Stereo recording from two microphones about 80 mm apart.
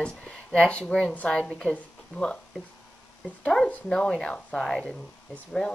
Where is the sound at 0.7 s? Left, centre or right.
Centre.